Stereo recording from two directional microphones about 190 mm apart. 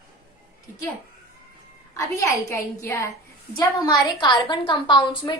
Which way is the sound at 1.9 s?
15° left (ahead or behind).